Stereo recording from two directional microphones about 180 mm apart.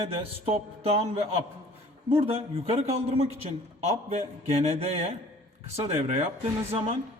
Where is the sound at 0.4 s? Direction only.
35° right (ahead or behind).